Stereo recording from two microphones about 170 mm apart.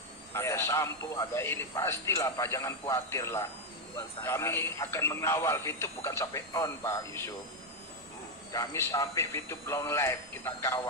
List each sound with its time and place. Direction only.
0.3 s speech: 15° left (ahead or behind)
8.5 s speech: 15° left (ahead or behind)